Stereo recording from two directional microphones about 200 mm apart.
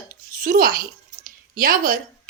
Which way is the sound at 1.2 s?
45° right (ahead or behind).